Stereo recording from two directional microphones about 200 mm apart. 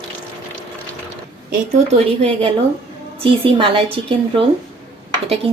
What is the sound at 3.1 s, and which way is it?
Speech, 25° right (ahead or behind).